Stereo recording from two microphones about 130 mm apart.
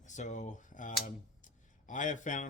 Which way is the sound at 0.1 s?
70° left (ahead or behind).